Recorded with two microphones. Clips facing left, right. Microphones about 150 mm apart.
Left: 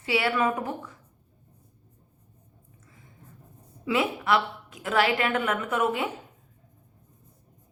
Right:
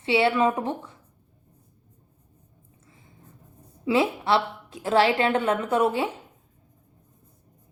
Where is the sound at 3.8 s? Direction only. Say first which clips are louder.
Right 3 dB; 30° right (ahead or behind).